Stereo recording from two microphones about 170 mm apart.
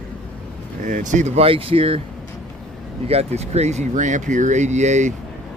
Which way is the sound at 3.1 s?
40° right (ahead or behind).